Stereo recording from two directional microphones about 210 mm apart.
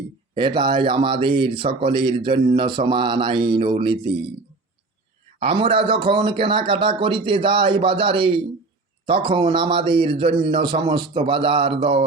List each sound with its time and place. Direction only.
0.3 s speech: 20° right (ahead or behind)
5.4 s speech: 25° right (ahead or behind)